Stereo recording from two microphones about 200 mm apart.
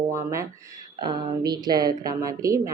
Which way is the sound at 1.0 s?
20° right (ahead or behind).